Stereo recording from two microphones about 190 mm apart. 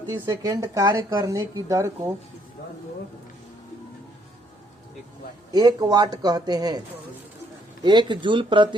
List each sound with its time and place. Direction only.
0.1 s a woman's voice: 15° right (ahead or behind)
5.5 s a man's voice: 20° right (ahead or behind)
7.9 s a man's voice: 25° right (ahead or behind)